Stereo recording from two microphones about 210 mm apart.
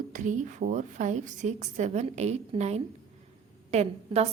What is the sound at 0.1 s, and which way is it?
A woman's voice, 35° right (ahead or behind).